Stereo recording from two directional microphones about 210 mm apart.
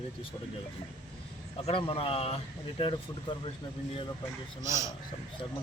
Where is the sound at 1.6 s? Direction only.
25° left (ahead or behind).